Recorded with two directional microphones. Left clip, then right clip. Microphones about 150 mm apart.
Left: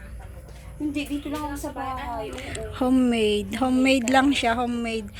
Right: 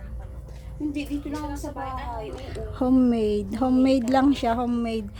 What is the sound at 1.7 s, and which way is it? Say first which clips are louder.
Speech: left 2 dB; 40° left (ahead or behind).